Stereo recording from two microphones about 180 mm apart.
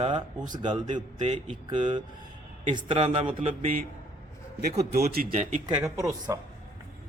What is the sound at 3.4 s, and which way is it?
Speech, 40° right (ahead or behind).